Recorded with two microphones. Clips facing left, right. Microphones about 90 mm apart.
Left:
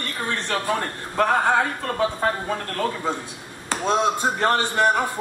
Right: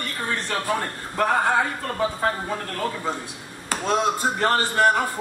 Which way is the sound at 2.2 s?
5° right (ahead or behind).